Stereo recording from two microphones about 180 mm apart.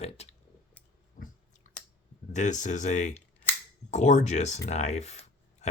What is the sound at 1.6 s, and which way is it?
Scissors, 40° left (ahead or behind).